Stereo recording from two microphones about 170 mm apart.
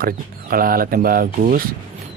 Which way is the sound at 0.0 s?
60° right (ahead or behind).